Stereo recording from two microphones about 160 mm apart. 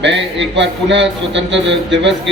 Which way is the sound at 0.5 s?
90° right.